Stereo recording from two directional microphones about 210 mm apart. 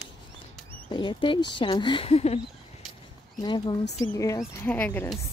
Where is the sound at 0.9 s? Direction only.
25° left (ahead or behind).